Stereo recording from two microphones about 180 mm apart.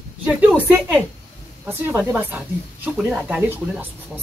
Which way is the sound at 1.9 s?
10° right (ahead or behind).